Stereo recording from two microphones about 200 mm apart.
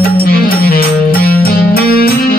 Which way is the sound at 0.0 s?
45° left (ahead or behind).